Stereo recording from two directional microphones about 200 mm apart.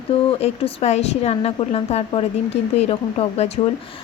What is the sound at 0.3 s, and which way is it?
A woman's voice, 30° left (ahead or behind).